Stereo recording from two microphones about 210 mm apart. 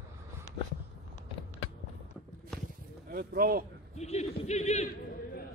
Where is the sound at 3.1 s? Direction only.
45° right (ahead or behind).